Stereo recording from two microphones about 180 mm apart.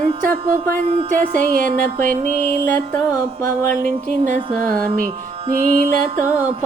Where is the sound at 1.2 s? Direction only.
50° right (ahead or behind).